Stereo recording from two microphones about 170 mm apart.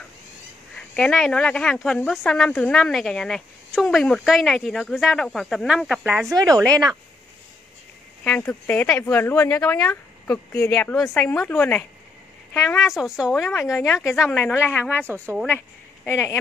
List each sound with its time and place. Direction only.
0.7 s speech: 5° left (ahead or behind)
6.3 s speech: 25° right (ahead or behind)
8.2 s speech: 10° left (ahead or behind)
12.8 s speech: centre (ahead or behind)
14.2 s speech: 10° left (ahead or behind)
16.1 s speech: 15° left (ahead or behind)